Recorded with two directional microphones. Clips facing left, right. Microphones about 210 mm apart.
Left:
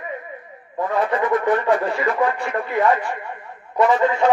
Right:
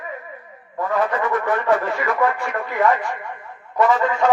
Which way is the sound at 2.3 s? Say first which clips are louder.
Left 1 dB; 35° left (ahead or behind).